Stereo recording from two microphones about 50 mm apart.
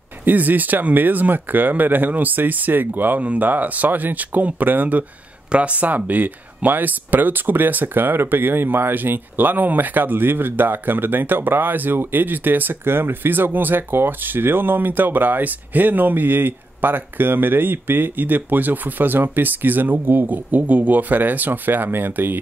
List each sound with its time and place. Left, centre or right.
0.2 s speech: right
5.5 s speech: right